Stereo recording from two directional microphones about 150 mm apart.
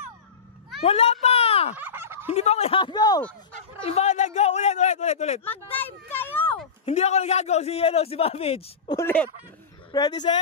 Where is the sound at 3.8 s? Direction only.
45° left (ahead or behind).